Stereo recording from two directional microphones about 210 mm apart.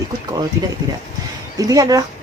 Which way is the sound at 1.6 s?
15° right (ahead or behind).